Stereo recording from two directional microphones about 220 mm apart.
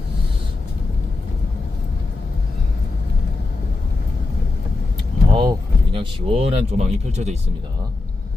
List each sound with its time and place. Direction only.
5.3 s speech: 20° right (ahead or behind)